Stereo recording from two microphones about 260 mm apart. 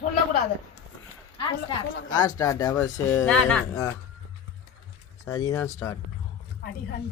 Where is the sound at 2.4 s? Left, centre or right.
Centre.